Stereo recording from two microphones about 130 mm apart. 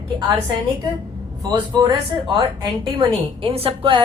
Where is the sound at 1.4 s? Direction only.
35° right (ahead or behind).